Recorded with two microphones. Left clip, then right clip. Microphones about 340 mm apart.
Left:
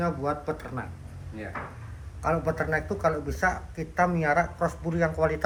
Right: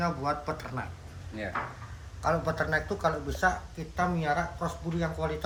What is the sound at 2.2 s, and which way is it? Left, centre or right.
Speech, centre.